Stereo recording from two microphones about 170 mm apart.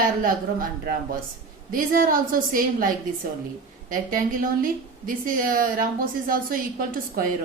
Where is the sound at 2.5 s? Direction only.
55° right (ahead or behind).